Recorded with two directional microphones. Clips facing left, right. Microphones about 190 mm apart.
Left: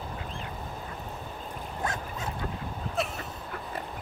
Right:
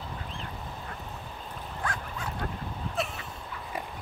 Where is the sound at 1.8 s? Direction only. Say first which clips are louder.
Left 2 dB; 25° left (ahead or behind).